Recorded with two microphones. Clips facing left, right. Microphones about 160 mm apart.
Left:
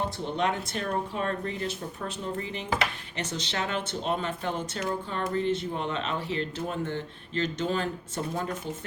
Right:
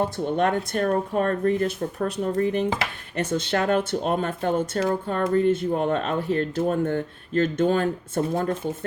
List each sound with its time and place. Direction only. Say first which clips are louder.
0.3 s speech: right 5 dB; 50° right (ahead or behind)